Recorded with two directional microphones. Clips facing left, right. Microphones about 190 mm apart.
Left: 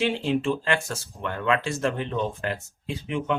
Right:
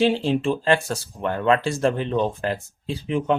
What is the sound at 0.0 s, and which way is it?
Speech, 35° right (ahead or behind).